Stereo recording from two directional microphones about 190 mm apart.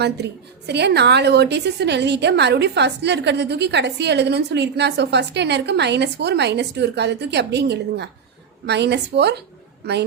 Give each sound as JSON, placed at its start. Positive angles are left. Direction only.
{"t": 0.7, "sound": "a woman's voice", "side_deg": -60}